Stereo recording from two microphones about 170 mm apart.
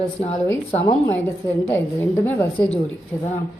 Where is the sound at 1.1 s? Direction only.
15° left (ahead or behind).